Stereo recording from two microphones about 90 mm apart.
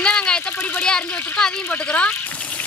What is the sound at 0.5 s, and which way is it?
Speech, 15° left (ahead or behind).